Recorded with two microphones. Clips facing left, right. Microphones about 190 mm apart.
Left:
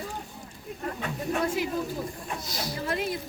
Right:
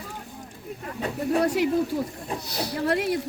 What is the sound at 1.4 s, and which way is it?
Speech, 70° right (ahead or behind).